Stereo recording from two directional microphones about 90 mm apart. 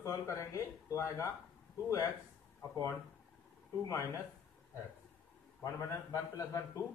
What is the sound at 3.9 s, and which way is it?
Speech, 35° left (ahead or behind).